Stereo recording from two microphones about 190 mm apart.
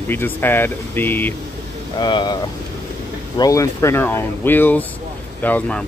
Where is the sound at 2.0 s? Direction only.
25° left (ahead or behind).